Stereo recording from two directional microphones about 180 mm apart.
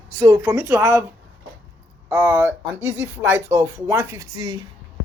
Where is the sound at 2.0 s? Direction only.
15° right (ahead or behind).